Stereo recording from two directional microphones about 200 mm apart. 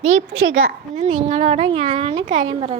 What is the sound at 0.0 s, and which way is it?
Speech, 90° right.